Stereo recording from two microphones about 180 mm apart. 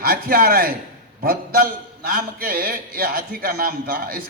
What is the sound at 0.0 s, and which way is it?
A man's voice, 55° right (ahead or behind).